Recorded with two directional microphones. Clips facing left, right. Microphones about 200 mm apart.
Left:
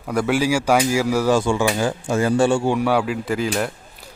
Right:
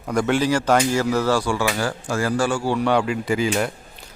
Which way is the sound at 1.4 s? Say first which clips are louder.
Left 3 dB; 25° left (ahead or behind).